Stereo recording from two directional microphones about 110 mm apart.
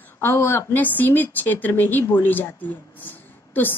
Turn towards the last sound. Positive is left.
turn(degrees=15)  # may be behind; listen again after turning